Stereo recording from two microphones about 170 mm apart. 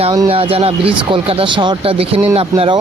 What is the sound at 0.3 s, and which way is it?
Speech, 35° right (ahead or behind).